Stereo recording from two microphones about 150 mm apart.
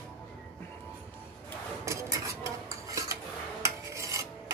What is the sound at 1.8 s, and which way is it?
Stir, 20° right (ahead or behind).